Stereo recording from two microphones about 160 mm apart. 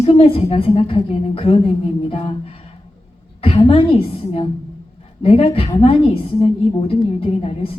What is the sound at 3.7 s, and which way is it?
A woman's voice, 35° left (ahead or behind).